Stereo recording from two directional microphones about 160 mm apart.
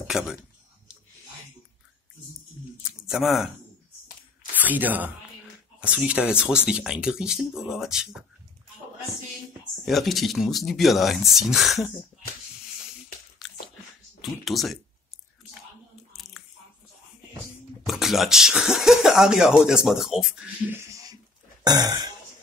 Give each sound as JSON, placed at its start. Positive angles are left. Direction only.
{"t": 0.0, "sound": "speech", "side_deg": -5}
{"t": 2.8, "sound": "speech", "side_deg": -5}
{"t": 4.6, "sound": "speech", "side_deg": -10}
{"t": 9.8, "sound": "speech", "side_deg": 0}
{"t": 13.4, "sound": "biting", "side_deg": 0}
{"t": 14.4, "sound": "speech", "side_deg": 0}
{"t": 16.1, "sound": "a sound", "side_deg": 0}
{"t": 17.8, "sound": "speech", "side_deg": 0}
{"t": 20.7, "sound": "a sound", "side_deg": -20}
{"t": 21.6, "sound": "throat clearing", "side_deg": -25}